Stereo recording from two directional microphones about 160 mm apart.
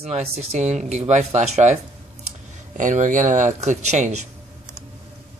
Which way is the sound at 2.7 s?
50° right (ahead or behind).